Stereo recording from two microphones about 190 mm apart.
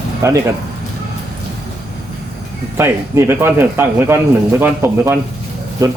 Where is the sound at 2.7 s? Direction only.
15° right (ahead or behind).